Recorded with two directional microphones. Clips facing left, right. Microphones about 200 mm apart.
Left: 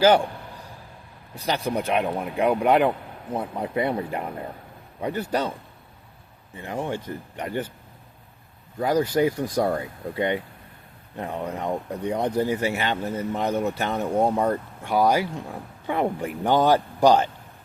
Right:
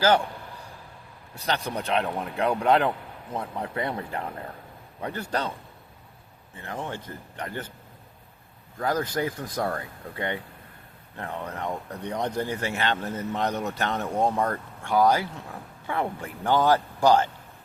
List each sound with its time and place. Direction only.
1.5 s speech: 10° left (ahead or behind)
6.6 s speech: 15° left (ahead or behind)
8.8 s speech: 10° left (ahead or behind)